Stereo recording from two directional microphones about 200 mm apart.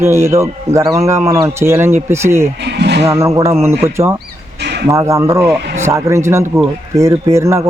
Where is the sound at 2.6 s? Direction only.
55° right (ahead or behind).